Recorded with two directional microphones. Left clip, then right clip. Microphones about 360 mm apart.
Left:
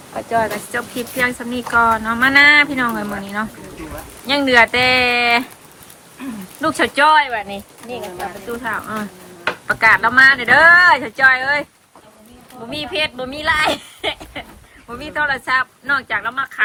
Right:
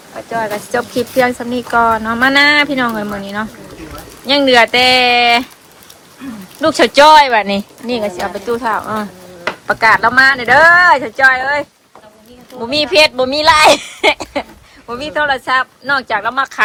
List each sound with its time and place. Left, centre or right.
0.3 s speech: centre
6.6 s speech: centre
8.6 s speech: centre
12.7 s speech: centre